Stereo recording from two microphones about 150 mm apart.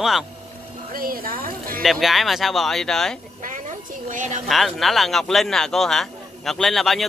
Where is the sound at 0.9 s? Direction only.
75° right (ahead or behind).